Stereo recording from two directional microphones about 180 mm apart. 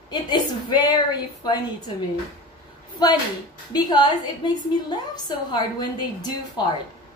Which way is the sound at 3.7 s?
20° left (ahead or behind).